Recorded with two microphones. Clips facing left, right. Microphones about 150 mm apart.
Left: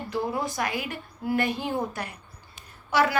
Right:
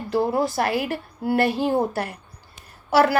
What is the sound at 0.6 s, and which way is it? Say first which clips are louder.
A woman's voice: right 7 dB; 50° right (ahead or behind).